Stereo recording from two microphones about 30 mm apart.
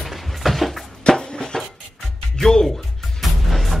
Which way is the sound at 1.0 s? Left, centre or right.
Left.